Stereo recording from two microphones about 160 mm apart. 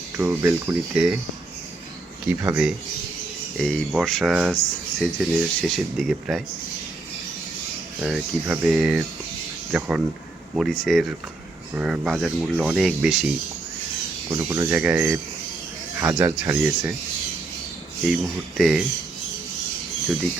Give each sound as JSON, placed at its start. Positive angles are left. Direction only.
{"t": 0.2, "sound": "speech", "side_deg": -15}
{"t": 2.2, "sound": "speech", "side_deg": -10}
{"t": 3.6, "sound": "speech", "side_deg": 0}
{"t": 8.0, "sound": "speech", "side_deg": -5}
{"t": 14.3, "sound": "speech", "side_deg": -20}
{"t": 14.7, "sound": "speech", "side_deg": -10}
{"t": 18.0, "sound": "speech", "side_deg": 0}